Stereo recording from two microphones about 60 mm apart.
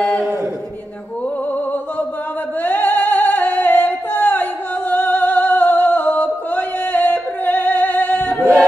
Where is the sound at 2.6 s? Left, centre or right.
Left.